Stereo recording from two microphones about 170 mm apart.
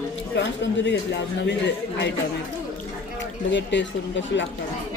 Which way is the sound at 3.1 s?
90° left.